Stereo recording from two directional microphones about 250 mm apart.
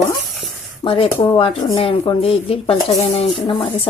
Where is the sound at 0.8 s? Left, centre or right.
Left.